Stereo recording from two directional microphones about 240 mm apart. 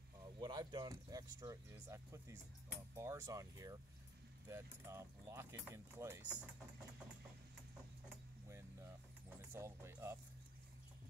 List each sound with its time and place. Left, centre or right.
0.4 s speech: centre
9.5 s speech: centre